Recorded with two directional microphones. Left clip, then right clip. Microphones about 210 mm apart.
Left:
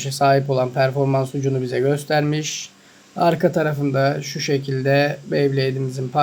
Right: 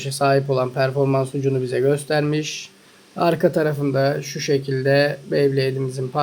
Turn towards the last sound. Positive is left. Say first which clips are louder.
# even
turn(degrees=0)  # may be behind; listen again after turning